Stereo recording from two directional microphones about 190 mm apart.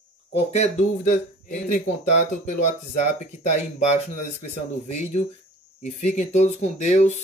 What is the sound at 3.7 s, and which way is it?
Speech, 40° left (ahead or behind).